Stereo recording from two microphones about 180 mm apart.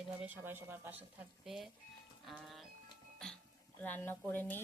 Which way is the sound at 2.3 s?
Centre (ahead or behind).